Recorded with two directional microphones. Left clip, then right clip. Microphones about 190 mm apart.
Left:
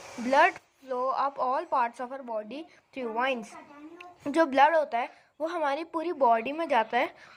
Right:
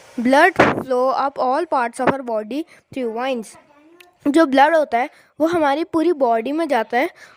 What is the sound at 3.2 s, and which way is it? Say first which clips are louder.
Speech: right 3 dB; 40° right (ahead or behind).